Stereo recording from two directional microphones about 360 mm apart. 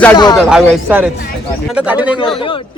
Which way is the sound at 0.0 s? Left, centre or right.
Centre.